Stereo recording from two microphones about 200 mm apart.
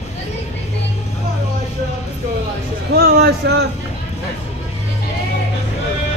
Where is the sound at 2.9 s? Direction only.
55° right (ahead or behind).